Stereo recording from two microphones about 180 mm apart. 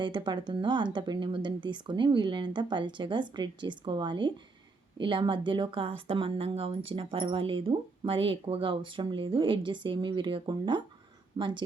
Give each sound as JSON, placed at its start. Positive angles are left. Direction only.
{"t": 0.0, "sound": "speech", "side_deg": -25}